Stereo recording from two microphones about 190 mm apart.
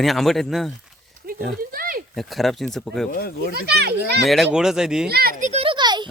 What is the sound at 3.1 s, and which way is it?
Speech, 50° left (ahead or behind).